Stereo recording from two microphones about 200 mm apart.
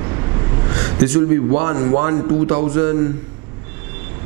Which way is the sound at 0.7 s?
20° right (ahead or behind).